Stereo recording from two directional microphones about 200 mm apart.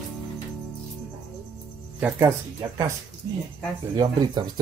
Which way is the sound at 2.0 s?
15° right (ahead or behind).